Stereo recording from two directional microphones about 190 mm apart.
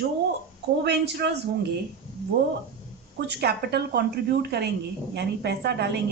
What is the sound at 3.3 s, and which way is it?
Speech, 60° right (ahead or behind).